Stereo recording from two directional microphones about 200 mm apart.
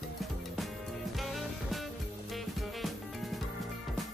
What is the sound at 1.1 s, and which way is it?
Music, centre (ahead or behind).